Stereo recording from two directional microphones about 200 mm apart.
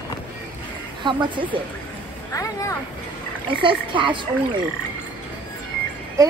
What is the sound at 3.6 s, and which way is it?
Speech, 25° right (ahead or behind).